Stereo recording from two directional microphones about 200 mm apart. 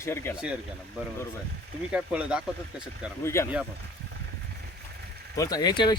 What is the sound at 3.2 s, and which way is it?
Speech, 15° left (ahead or behind).